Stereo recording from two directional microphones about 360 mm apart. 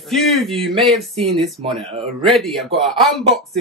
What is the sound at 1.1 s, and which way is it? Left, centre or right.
Speech, centre.